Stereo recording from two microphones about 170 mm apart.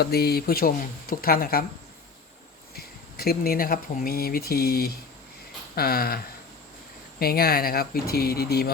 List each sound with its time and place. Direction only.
0.0 s speech: 65° left (ahead or behind)
2.7 s speech: 65° left (ahead or behind)